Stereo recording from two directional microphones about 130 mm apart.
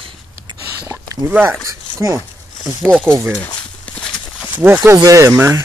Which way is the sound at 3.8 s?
10° left (ahead or behind).